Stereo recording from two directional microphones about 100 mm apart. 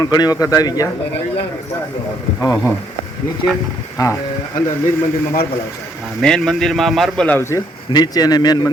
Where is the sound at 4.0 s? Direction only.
40° left (ahead or behind).